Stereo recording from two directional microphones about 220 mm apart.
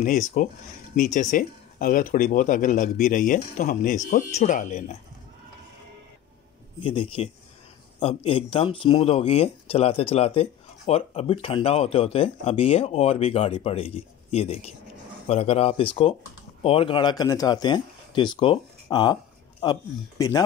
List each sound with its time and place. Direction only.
0.3 s speech: 40° left (ahead or behind)
6.8 s speech: 25° left (ahead or behind)